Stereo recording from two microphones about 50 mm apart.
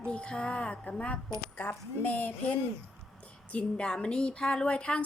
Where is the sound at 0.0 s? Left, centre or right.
Centre.